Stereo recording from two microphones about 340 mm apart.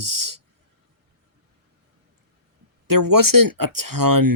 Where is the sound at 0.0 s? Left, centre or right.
Right.